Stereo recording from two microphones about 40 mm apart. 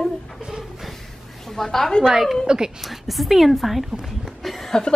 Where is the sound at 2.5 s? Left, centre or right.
Centre.